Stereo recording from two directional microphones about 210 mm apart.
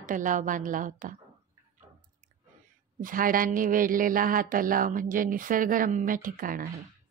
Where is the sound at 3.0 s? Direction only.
40° right (ahead or behind).